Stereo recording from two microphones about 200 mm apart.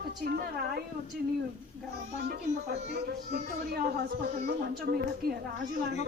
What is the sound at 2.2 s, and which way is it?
Speech, 55° right (ahead or behind).